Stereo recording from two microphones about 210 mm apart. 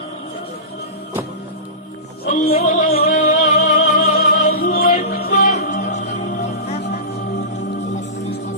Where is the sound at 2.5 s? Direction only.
35° left (ahead or behind).